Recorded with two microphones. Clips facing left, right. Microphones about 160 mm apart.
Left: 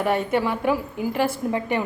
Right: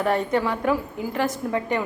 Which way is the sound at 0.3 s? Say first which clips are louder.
Even; 15° left (ahead or behind).